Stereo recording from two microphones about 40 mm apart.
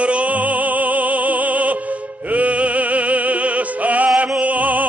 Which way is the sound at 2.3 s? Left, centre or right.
Right.